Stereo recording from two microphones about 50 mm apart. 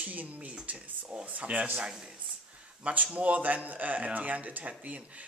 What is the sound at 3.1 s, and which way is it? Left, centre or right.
Speech, right.